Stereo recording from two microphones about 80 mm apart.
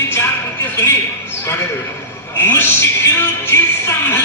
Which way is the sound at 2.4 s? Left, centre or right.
Left.